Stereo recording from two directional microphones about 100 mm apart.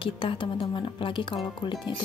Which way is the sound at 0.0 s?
60° left (ahead or behind).